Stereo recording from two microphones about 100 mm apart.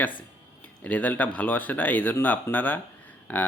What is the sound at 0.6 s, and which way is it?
Speech, 15° left (ahead or behind).